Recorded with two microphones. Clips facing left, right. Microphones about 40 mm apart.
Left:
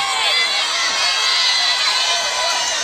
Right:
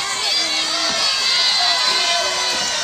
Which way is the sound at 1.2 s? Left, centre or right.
Centre.